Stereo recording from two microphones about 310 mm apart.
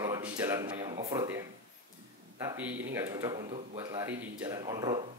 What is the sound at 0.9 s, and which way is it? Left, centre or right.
Speech, centre.